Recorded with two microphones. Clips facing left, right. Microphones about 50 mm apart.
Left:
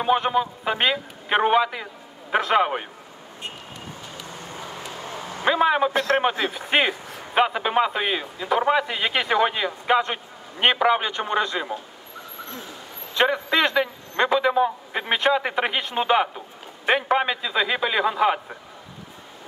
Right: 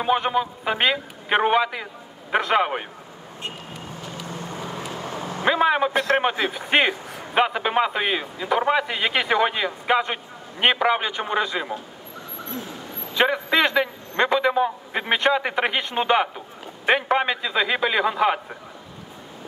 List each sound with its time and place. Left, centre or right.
0.0 s a man's voice: centre
4.3 s vehicle: right
4.6 s vehicle: right
5.4 s a man's voice: centre
13.1 s a man's voice: centre